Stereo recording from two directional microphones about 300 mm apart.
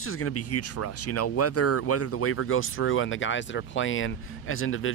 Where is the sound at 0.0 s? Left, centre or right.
Left.